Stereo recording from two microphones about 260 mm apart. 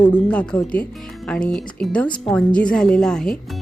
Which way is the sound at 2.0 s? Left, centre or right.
Centre.